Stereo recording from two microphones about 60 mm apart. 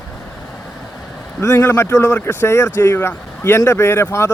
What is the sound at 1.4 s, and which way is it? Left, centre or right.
Speech, left.